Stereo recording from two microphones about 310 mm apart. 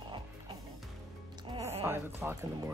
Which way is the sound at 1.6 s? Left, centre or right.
Centre.